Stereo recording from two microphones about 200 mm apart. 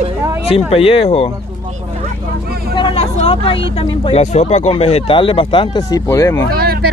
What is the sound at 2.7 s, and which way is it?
Speech, 25° left (ahead or behind).